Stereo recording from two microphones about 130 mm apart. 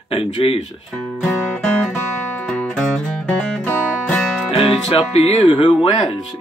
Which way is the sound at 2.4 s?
10° left (ahead or behind).